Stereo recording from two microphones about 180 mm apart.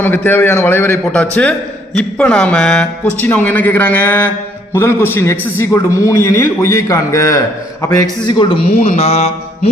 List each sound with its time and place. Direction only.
0.0 s a man's voice: 10° left (ahead or behind); by 9.3 s 35° left (ahead or behind)